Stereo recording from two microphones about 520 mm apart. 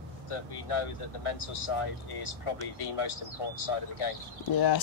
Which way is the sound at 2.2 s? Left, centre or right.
Left.